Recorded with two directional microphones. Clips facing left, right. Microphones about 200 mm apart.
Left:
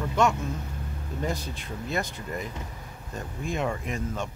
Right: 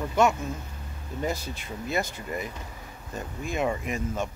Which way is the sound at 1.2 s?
5° right (ahead or behind).